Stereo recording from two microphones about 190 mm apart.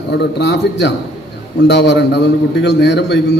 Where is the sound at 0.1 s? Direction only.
65° left (ahead or behind).